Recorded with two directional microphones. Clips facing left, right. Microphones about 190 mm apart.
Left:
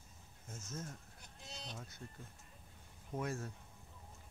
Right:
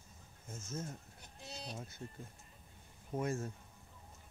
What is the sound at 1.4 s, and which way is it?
Sheep, 5° right (ahead or behind).